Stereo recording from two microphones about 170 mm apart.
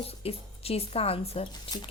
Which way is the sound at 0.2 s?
35° left (ahead or behind).